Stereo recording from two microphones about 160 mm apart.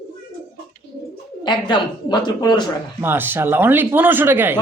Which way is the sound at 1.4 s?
30° left (ahead or behind).